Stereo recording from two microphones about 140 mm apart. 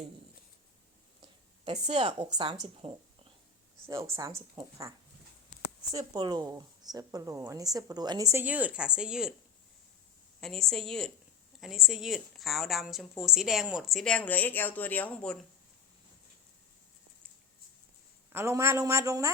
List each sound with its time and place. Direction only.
1.6 s a woman's voice: 50° right (ahead or behind)
2.1 s a woman's voice: 30° right (ahead or behind)
3.8 s a woman's voice: 20° right (ahead or behind)
4.6 s a woman's voice: 40° right (ahead or behind)
5.9 s a woman's voice: 30° right (ahead or behind)
8.3 s a woman's voice: 15° right (ahead or behind)
10.4 s a woman's voice: centre (ahead or behind)
18.3 s a woman's voice: 20° right (ahead or behind)